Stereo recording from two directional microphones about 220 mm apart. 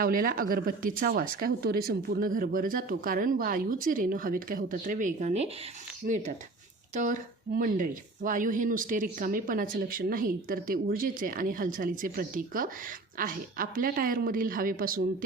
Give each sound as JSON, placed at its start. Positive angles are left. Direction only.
{"t": 0.0, "sound": "speech", "side_deg": -40}